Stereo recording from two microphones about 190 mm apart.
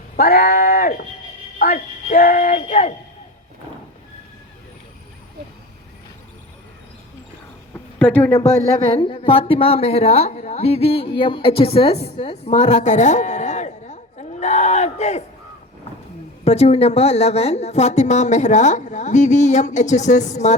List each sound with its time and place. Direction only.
0.2 s a woman's voice: 55° left (ahead or behind); by 2.9 s 40° left (ahead or behind)
7.7 s a sound: 10° left (ahead or behind)
8.4 s speech: 15° left (ahead or behind)
9.0 s a woman's voice: 25° left (ahead or behind)
16.4 s a woman's voice: 35° left (ahead or behind)